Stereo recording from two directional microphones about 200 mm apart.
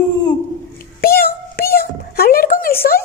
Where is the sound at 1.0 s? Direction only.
50° left (ahead or behind).